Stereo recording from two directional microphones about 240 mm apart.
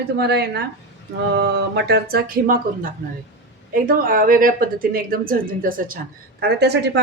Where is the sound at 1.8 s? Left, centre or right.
Right.